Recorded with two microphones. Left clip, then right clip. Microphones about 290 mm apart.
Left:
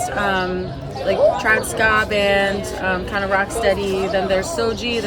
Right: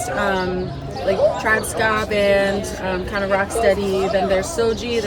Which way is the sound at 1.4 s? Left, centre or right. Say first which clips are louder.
Left 2 dB; centre.